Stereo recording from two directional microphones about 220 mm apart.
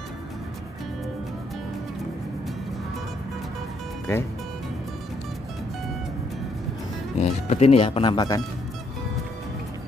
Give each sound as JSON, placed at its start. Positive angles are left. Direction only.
{"t": 4.1, "sound": "speech", "side_deg": 10}
{"t": 7.2, "sound": "speech", "side_deg": 30}